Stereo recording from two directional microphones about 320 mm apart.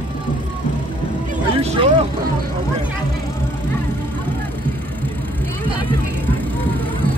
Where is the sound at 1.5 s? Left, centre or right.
Centre.